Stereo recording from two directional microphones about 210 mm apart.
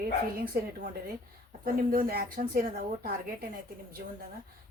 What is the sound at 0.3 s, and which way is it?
Speech, 45° right (ahead or behind).